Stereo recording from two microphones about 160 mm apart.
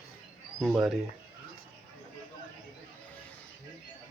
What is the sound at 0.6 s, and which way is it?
Speech, centre (ahead or behind).